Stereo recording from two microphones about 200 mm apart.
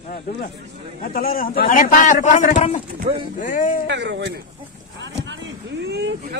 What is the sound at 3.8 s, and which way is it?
Speech, 65° right (ahead or behind).